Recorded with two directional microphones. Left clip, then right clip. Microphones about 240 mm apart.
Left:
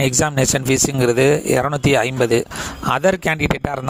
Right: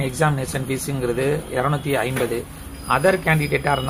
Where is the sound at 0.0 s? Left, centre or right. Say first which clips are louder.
Left 4 dB; left.